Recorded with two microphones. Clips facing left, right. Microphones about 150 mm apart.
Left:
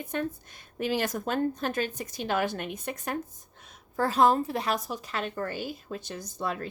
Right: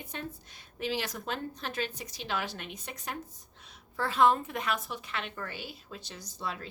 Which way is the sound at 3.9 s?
40° left (ahead or behind).